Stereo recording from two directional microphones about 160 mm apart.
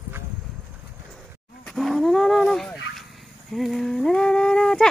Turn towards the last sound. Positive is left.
turn(degrees=5)  # may be behind; listen again after turning